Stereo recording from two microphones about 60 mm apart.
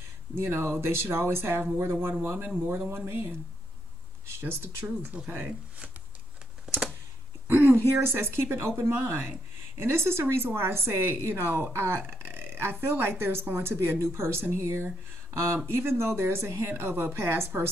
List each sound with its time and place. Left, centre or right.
0.4 s speech: right
4.4 s speech: right
4.8 s speech: right
7.4 s speech: right